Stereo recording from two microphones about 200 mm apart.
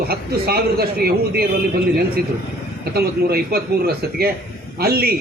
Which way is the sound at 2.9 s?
50° right (ahead or behind).